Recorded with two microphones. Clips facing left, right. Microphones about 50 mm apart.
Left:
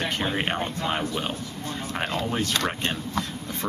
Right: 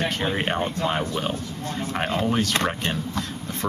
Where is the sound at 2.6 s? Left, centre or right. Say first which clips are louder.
Right 2 dB; centre.